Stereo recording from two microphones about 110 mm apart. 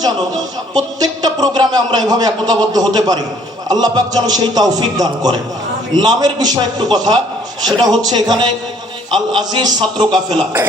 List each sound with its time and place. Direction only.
0.8 s a man's voice: 35° right (ahead or behind)